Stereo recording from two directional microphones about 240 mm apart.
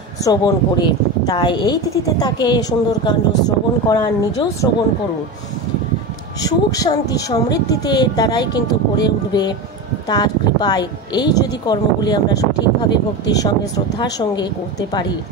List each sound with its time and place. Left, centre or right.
0.2 s speech: centre
6.4 s speech: centre